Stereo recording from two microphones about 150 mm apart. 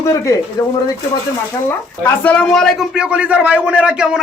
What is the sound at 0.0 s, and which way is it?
Speech, 20° left (ahead or behind).